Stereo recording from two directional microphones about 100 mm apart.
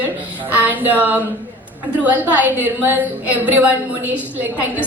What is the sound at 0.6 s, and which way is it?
Music, 20° right (ahead or behind).